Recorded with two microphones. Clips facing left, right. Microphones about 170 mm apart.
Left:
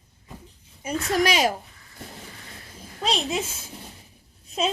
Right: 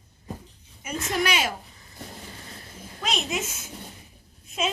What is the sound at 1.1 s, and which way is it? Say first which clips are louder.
Speech: left 5 dB; 40° left (ahead or behind).